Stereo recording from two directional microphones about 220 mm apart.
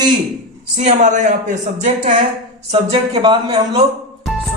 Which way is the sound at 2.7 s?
20° right (ahead or behind).